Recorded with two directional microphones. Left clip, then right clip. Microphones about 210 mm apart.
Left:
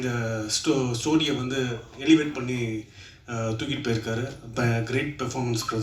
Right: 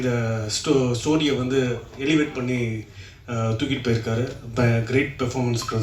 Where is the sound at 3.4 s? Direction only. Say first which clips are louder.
Right 4 dB; 55° left (ahead or behind).